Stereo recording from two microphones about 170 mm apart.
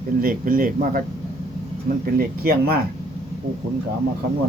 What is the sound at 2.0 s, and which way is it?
Speech, 60° right (ahead or behind).